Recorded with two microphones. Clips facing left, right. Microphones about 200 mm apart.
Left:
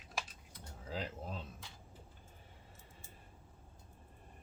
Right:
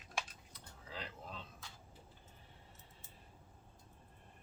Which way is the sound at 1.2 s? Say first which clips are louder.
Left 5 dB; 40° left (ahead or behind).